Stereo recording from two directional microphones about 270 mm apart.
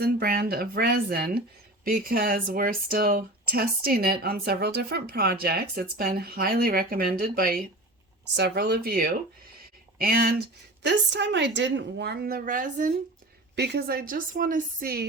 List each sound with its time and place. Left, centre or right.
0.0 s speech: right